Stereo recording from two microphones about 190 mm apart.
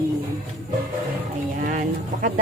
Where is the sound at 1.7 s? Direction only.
40° right (ahead or behind).